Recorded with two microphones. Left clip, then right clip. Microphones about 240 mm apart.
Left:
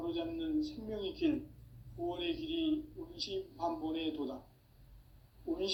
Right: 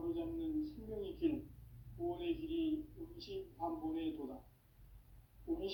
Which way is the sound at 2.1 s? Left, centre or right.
Left.